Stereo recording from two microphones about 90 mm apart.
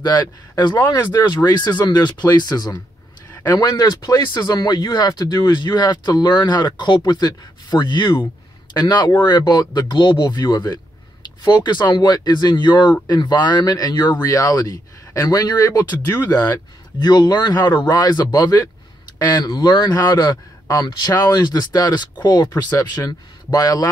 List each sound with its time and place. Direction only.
0.0 s speech: 50° left (ahead or behind)
14.2 s speech: 35° left (ahead or behind)
17.0 s speech: 50° left (ahead or behind)